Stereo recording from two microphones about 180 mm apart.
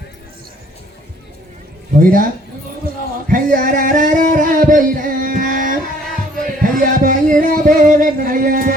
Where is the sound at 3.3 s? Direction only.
50° right (ahead or behind).